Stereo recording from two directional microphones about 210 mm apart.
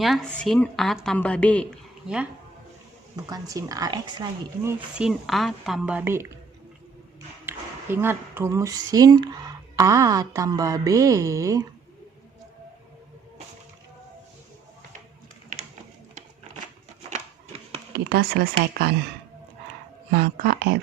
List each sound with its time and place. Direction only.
0.0 s a woman's voice: centre (ahead or behind)
3.2 s speech: 15° right (ahead or behind)
4.9 s a woman's voice: centre (ahead or behind)
7.4 s speech: 10° right (ahead or behind)
17.9 s speech: 45° right (ahead or behind)
20.1 s speech: 50° right (ahead or behind)